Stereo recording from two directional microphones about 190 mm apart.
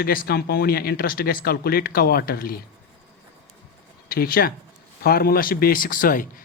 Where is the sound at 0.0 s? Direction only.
50° left (ahead or behind).